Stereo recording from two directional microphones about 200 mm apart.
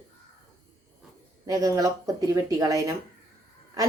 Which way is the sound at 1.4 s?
20° right (ahead or behind).